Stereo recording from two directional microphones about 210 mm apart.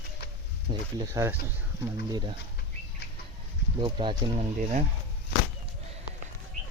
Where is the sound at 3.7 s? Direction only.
25° right (ahead or behind).